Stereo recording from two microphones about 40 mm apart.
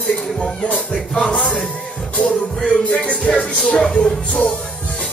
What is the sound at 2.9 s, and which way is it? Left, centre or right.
Speech, left.